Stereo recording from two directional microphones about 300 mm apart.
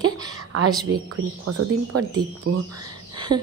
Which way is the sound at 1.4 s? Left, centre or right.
Right.